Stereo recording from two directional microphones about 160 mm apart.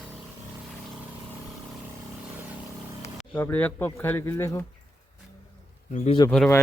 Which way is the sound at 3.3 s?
10° left (ahead or behind).